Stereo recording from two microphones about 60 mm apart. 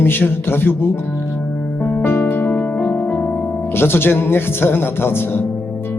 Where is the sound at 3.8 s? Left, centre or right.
Left.